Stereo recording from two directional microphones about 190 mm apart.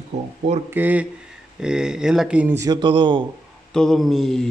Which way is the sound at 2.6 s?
20° right (ahead or behind).